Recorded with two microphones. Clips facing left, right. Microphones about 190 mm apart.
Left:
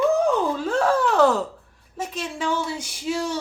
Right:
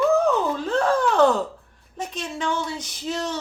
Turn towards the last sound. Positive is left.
turn(degrees=10)  # may be behind; listen again after turning